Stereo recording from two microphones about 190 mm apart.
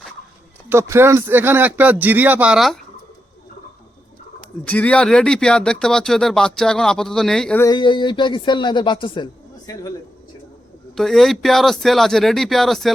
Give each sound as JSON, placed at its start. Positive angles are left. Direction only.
{"t": 0.7, "sound": "speech", "side_deg": -15}
{"t": 4.6, "sound": "speech", "side_deg": 10}
{"t": 7.6, "sound": "speech", "side_deg": 25}
{"t": 10.9, "sound": "speech", "side_deg": 0}